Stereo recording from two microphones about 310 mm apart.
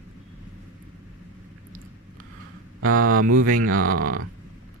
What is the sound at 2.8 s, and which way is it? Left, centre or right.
Speech, right.